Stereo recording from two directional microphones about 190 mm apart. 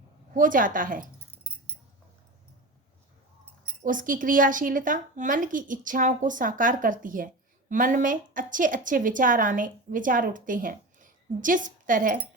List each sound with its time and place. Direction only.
0.3 s a woman's voice: 45° right (ahead or behind)
3.8 s a woman's voice: 45° right (ahead or behind)